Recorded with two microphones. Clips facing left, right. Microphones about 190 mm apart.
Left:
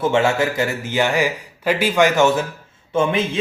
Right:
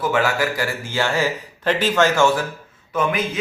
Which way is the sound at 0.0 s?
25° left (ahead or behind).